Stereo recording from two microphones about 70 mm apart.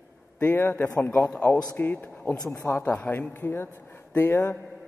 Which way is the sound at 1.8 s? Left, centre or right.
Left.